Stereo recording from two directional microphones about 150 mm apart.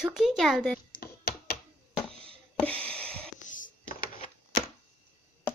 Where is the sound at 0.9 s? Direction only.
90° left.